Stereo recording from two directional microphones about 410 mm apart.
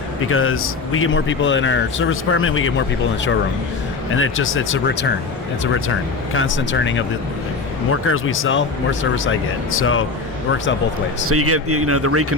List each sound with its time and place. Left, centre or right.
0.3 s a man's voice: left
4.1 s a man's voice: left
11.3 s speech: right